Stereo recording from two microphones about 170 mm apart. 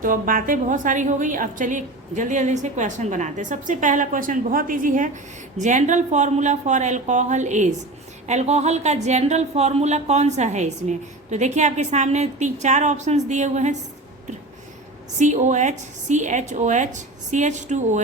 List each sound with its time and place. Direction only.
0.0 s speech: 55° right (ahead or behind)
15.2 s speech: 45° right (ahead or behind)